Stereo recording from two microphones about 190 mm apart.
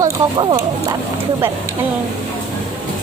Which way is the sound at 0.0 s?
20° right (ahead or behind).